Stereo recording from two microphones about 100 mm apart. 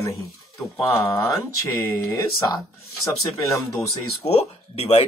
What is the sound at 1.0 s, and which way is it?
Speech, 30° left (ahead or behind).